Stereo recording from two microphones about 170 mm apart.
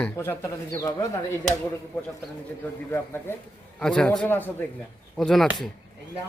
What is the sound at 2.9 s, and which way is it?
A man's voice, 15° left (ahead or behind).